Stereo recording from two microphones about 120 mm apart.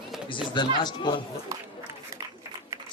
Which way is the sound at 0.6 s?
40° left (ahead or behind).